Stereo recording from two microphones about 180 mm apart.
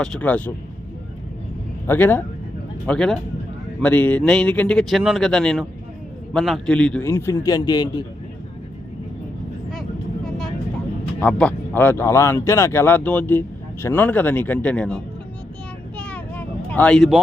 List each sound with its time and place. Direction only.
0.0 s speech: 5° left (ahead or behind)
1.9 s speech: 10° left (ahead or behind)
11.2 s speech: 5° left (ahead or behind)
16.0 s a sound: 5° left (ahead or behind)